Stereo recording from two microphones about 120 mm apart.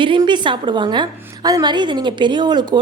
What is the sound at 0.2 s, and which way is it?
A woman's voice, 40° right (ahead or behind).